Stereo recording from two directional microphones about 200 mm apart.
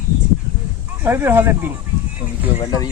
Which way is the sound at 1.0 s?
10° right (ahead or behind).